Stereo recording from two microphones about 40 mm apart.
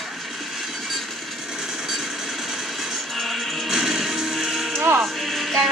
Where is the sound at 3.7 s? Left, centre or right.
Centre.